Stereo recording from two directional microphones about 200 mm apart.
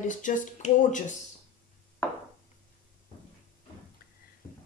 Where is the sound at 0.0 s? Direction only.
40° left (ahead or behind).